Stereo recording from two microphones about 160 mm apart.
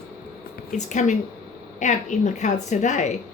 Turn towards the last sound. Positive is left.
turn(degrees=45)  # may be behind; listen again after turning